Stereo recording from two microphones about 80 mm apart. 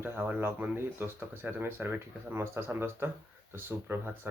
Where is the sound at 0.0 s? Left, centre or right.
Right.